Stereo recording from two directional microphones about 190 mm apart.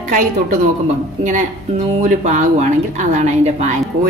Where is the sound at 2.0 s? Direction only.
40° right (ahead or behind).